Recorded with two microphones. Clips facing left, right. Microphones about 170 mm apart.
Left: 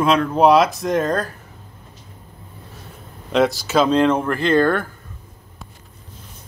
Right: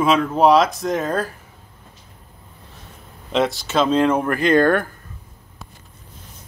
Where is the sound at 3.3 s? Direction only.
Centre (ahead or behind); by 4.9 s 15° right (ahead or behind).